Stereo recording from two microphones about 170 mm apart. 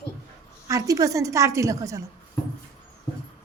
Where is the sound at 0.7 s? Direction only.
20° right (ahead or behind).